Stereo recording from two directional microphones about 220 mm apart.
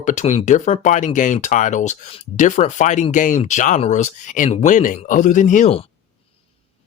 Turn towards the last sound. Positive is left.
turn(degrees=25)  # may be behind; listen again after turning